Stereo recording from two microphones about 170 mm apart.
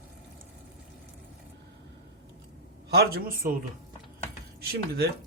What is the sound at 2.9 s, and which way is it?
Speech, 65° right (ahead or behind).